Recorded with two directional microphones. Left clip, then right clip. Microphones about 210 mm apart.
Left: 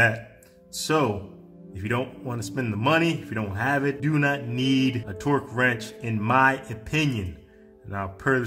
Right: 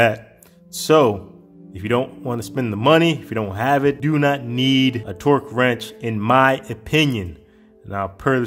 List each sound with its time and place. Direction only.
0.7 s a man's voice: 35° right (ahead or behind)